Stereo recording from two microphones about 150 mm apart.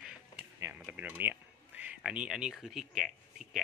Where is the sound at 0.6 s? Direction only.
10° right (ahead or behind).